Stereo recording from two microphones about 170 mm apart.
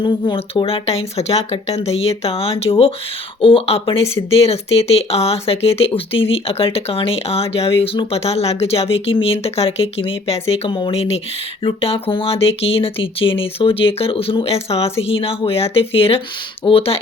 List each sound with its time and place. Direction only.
0.0 s speech: 30° left (ahead or behind)